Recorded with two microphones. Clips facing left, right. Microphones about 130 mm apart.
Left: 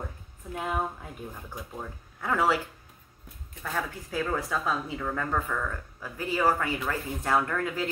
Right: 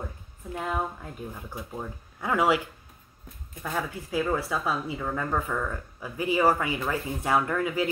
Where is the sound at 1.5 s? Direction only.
10° right (ahead or behind).